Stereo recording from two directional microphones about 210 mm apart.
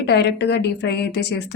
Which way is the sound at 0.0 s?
50° left (ahead or behind).